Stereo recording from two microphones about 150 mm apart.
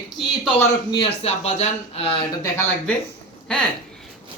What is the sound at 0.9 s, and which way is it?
Speech, 40° left (ahead or behind).